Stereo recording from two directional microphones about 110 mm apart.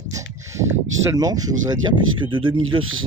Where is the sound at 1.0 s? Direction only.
30° right (ahead or behind).